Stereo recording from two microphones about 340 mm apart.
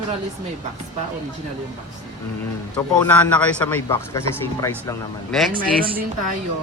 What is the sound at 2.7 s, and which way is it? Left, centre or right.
A man's voice, centre.